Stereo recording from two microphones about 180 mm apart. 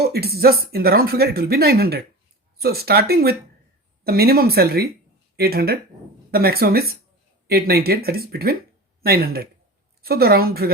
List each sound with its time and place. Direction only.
0.0 s speech: 60° right (ahead or behind)